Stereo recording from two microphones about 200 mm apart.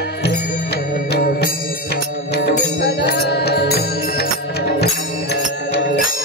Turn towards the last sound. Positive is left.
turn(degrees=55)  # may be behind; listen again after turning